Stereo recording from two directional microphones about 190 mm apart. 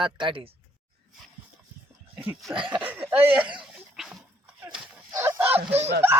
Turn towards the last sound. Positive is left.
turn(degrees=-30)  # may be behind; listen again after turning